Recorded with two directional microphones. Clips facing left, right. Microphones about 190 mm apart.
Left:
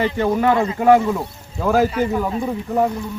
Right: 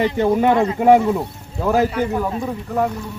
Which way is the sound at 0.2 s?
15° right (ahead or behind).